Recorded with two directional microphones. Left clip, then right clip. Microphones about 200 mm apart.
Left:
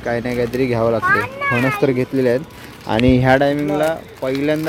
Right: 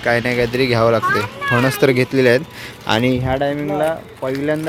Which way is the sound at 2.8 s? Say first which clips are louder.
Left 1 dB; 20° left (ahead or behind).